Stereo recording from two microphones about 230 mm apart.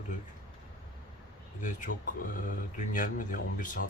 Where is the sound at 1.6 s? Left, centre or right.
Left.